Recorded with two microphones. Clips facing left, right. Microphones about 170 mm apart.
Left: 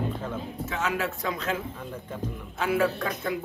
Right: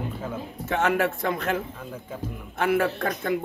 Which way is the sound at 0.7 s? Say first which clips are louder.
Right 7 dB; 55° right (ahead or behind).